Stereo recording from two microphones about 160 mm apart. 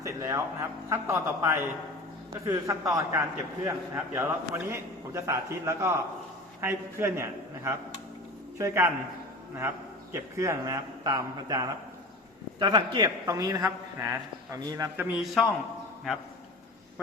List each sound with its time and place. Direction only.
0.0 s a man's voice: 20° right (ahead or behind)
14.9 s a man's voice: 10° right (ahead or behind)